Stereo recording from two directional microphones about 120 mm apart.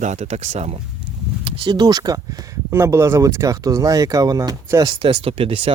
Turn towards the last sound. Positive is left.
turn(degrees=-50)  # may be behind; listen again after turning